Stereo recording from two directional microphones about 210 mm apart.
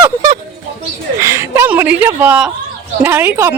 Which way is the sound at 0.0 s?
15° right (ahead or behind).